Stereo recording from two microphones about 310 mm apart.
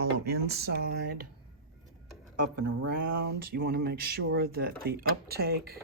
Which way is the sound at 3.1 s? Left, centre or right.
Right.